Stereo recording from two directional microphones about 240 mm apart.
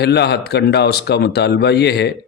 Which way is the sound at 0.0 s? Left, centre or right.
Left.